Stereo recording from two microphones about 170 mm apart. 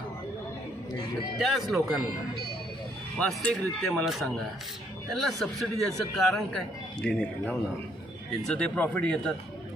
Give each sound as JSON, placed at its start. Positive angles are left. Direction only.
{"t": 1.4, "sound": "a man's voice", "side_deg": 0}
{"t": 3.2, "sound": "a man's voice", "side_deg": 5}